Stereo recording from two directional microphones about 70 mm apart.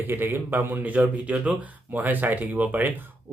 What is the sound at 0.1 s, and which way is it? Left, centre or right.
Speech, right.